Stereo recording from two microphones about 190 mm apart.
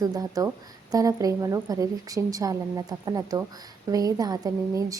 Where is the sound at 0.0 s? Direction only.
20° right (ahead or behind).